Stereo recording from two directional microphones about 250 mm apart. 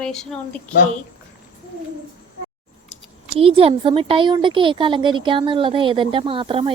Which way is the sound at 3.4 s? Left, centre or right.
Right.